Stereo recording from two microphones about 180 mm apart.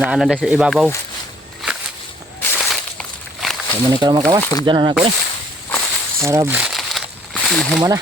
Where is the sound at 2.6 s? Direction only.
Centre (ahead or behind).